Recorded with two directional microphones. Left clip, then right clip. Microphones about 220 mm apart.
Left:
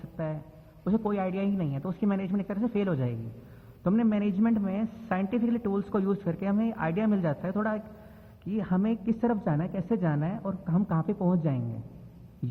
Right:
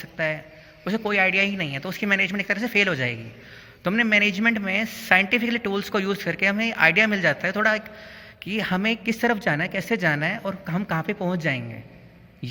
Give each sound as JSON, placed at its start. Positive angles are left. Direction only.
{"t": 0.9, "sound": "a man's voice", "side_deg": -30}